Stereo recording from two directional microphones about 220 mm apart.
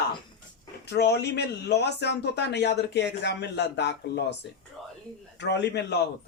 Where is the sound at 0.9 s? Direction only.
50° left (ahead or behind).